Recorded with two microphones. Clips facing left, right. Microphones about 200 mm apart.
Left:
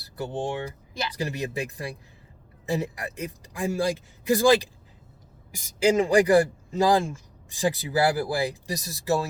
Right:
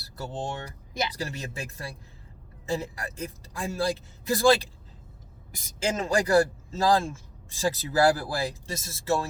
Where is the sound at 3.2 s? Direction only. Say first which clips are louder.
Left 4 dB; 15° left (ahead or behind).